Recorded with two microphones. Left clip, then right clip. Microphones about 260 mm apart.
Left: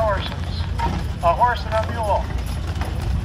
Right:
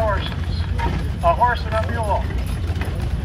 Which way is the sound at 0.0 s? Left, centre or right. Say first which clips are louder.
Left 1 dB; left.